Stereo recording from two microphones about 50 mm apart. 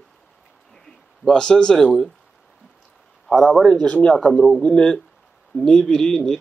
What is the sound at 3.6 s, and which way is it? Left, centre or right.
Speech, centre.